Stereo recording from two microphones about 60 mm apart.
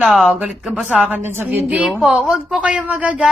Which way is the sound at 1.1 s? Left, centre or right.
Right.